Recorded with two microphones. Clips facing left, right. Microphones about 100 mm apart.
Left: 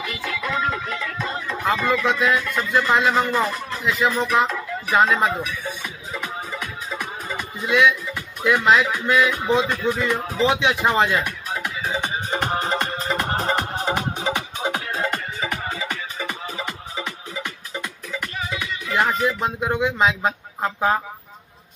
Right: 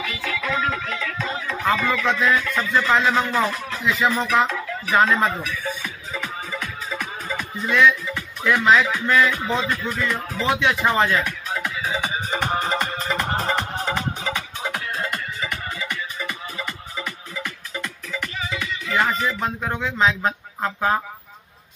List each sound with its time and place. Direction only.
0.0 s music: 5° left (ahead or behind)
1.9 s speech: 5° left (ahead or behind)
11.8 s music: centre (ahead or behind); by 14.7 s 20° left (ahead or behind)
14.9 s music: 35° left (ahead or behind)
15.6 s music: 25° left (ahead or behind)
18.9 s speech: 15° left (ahead or behind)